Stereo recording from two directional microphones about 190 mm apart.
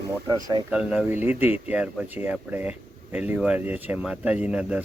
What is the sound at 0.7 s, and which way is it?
Speech, 5° right (ahead or behind).